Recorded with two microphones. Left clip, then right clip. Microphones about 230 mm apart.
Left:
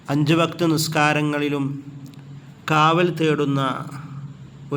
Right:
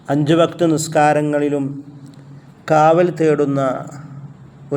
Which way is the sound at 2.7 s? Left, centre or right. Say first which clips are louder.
Right 5 dB; left.